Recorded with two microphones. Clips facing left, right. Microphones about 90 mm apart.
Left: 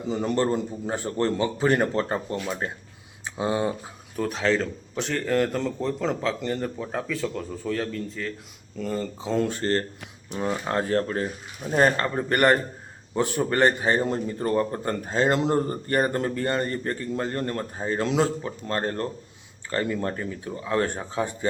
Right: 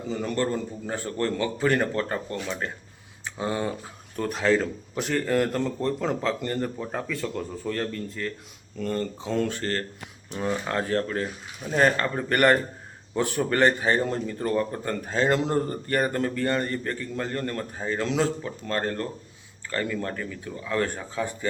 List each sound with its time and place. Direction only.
0.1 s a man's voice: 25° left (ahead or behind)
4.2 s speech: centre (ahead or behind)
9.5 s a man's voice: 30° left (ahead or behind)
11.6 s a man's voice: 15° left (ahead or behind)